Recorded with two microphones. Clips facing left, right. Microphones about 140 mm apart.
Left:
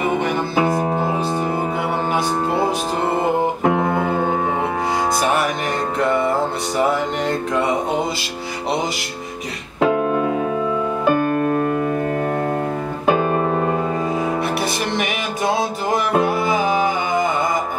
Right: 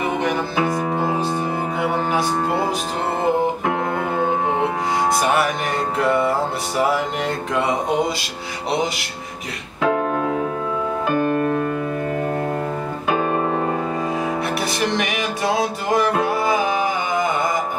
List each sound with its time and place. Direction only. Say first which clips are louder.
0.6 s music: left 5 dB; 25° left (ahead or behind)
5.9 s music: even; centre (ahead or behind)